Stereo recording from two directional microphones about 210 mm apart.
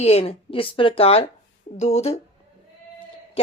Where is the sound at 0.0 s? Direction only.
30° left (ahead or behind).